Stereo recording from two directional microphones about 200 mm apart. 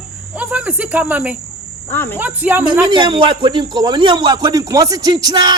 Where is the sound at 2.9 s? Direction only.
25° right (ahead or behind).